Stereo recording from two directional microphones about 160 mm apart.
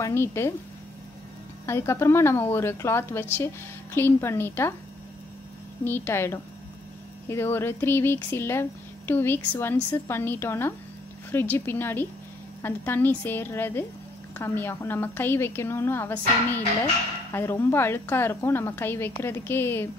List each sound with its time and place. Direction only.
0.0 s a woman's voice: 15° left (ahead or behind)
1.7 s a woman's voice: 15° left (ahead or behind)
5.9 s a woman's voice: 15° left (ahead or behind)